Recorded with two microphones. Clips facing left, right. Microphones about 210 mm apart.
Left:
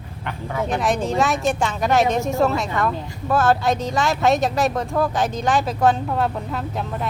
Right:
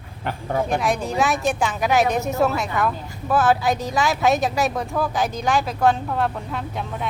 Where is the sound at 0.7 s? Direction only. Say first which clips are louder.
Left 4 dB; centre (ahead or behind).